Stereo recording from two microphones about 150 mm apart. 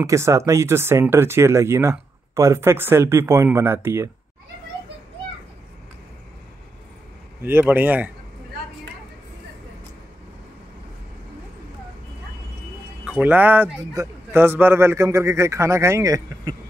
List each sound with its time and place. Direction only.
0.0 s speech: 20° right (ahead or behind)
7.4 s speech: 15° right (ahead or behind)
13.0 s a man's voice: 10° right (ahead or behind)